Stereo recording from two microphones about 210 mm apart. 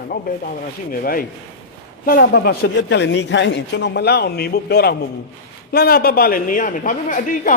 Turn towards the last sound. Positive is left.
turn(degrees=40)  # may be behind; listen again after turning